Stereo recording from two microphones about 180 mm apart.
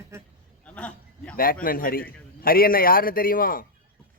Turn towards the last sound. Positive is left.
turn(degrees=55)  # may be behind; listen again after turning